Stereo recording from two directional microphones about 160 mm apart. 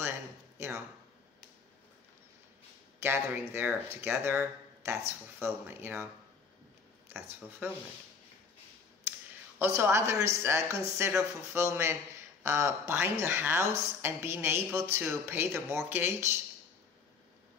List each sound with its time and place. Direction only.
3.0 s speech: 15° right (ahead or behind)
7.1 s speech: 15° right (ahead or behind)
9.6 s speech: 15° right (ahead or behind)